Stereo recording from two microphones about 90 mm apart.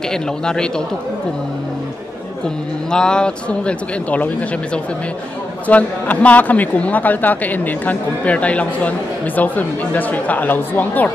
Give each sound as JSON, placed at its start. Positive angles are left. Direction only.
{"t": 0.1, "sound": "a man's voice", "side_deg": 10}
{"t": 2.9, "sound": "a man's voice", "side_deg": 10}
{"t": 5.7, "sound": "a man's voice", "side_deg": 15}